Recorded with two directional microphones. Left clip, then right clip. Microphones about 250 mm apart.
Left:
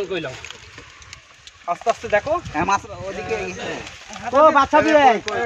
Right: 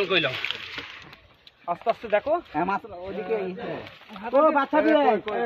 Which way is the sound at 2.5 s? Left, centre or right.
Centre.